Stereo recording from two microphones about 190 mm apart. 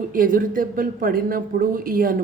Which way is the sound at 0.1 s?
45° right (ahead or behind).